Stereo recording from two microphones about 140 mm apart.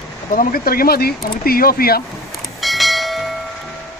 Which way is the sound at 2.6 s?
Centre (ahead or behind).